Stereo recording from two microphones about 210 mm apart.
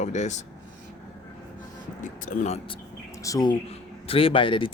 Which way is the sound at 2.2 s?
35° left (ahead or behind).